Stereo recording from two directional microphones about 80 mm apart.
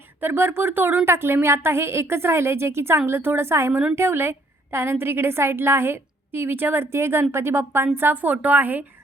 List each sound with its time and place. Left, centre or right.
0.2 s a woman's voice: right
3.7 s a woman's voice: centre
3.9 s a woman's voice: right